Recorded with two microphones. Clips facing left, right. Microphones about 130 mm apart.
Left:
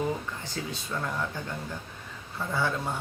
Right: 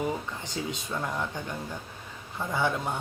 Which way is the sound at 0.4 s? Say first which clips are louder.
Right 2 dB; 20° right (ahead or behind).